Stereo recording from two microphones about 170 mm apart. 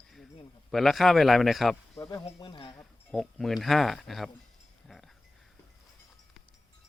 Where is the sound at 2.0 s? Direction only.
20° left (ahead or behind).